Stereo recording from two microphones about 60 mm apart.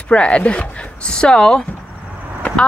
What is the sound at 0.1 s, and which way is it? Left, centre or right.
Speech, centre.